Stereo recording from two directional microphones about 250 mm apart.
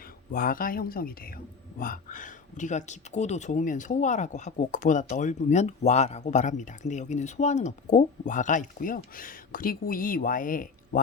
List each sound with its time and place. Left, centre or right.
0.3 s speech: left